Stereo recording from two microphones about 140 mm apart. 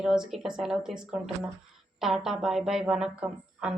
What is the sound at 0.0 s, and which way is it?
A woman's voice, 5° right (ahead or behind).